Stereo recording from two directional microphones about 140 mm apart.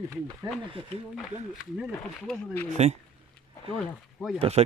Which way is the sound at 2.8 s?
50° right (ahead or behind).